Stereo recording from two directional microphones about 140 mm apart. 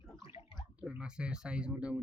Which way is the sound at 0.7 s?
10° right (ahead or behind).